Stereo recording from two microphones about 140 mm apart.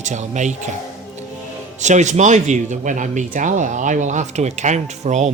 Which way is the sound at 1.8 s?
55° right (ahead or behind).